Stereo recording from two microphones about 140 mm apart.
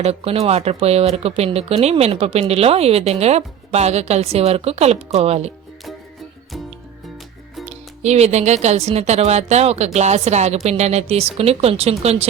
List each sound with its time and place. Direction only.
0.0 s speech: 45° right (ahead or behind)
7.6 s speech: 55° right (ahead or behind)